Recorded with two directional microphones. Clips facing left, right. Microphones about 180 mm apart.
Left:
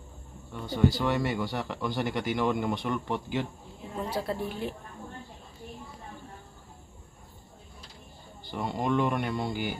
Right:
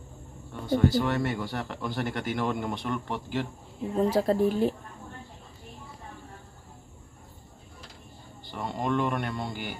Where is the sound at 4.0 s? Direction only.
40° right (ahead or behind).